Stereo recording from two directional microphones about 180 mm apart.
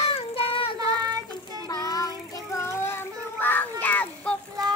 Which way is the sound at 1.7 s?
20° left (ahead or behind).